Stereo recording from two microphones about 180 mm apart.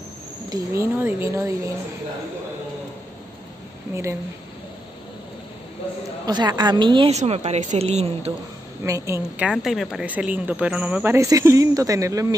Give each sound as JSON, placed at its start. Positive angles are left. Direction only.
{"t": 0.5, "sound": "a woman's voice", "side_deg": -15}
{"t": 3.9, "sound": "a woman's voice", "side_deg": -15}
{"t": 6.2, "sound": "a woman's voice", "side_deg": -20}
{"t": 8.8, "sound": "a woman's voice", "side_deg": -15}